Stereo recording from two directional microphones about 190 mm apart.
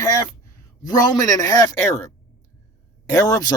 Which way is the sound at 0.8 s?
20° left (ahead or behind).